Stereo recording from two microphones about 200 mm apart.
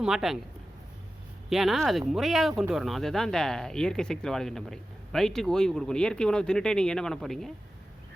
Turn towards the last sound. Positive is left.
turn(degrees=0)  # may be behind; listen again after turning